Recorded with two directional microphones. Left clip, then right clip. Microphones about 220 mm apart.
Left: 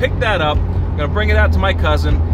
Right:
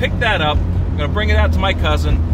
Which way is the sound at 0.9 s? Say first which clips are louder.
Left 2 dB; 10° left (ahead or behind).